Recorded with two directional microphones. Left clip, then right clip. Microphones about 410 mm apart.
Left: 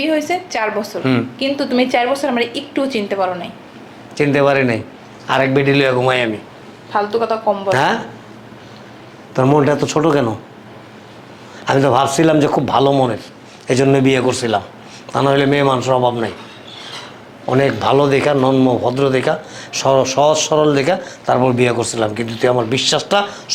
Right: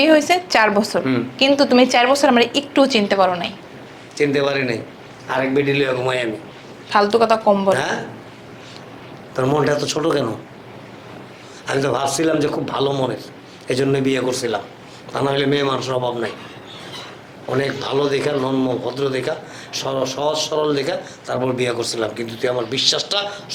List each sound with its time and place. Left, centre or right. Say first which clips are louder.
0.0 s speech: right 4 dB; right
4.2 s a man's voice: left 5 dB; left
6.9 s speech: right 2 dB; right
7.7 s a man's voice: left 3 dB; left
9.3 s speech: left 4 dB; left
11.6 s a man's voice: left 6 dB; left
17.5 s a man's voice: left 7 dB; left